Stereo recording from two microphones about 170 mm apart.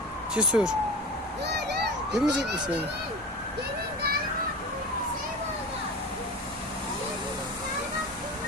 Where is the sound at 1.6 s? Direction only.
75° right (ahead or behind).